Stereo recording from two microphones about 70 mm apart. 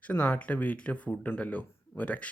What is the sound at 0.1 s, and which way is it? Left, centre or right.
Speech, left.